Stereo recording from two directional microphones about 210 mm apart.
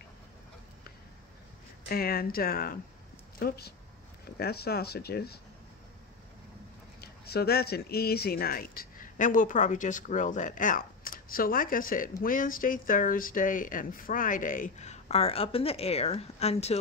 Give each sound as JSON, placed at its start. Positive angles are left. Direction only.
{"t": 1.9, "sound": "speech", "side_deg": 45}
{"t": 7.0, "sound": "speech", "side_deg": 50}